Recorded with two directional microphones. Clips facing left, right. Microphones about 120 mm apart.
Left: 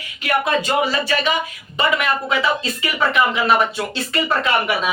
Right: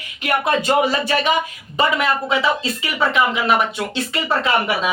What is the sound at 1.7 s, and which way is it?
Speech, 30° right (ahead or behind).